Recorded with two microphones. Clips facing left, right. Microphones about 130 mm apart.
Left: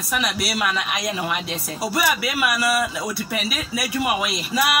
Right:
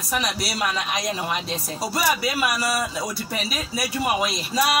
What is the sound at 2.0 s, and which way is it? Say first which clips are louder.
A man's voice: even; 35° right (ahead or behind).